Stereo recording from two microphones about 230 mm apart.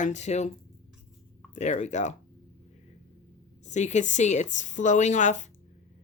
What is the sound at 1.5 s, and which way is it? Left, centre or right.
Speech, left.